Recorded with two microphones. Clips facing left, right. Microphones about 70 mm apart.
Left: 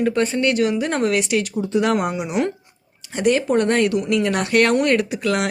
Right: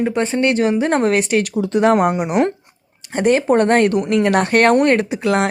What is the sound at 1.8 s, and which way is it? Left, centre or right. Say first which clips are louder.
Speech: right 6 dB; right.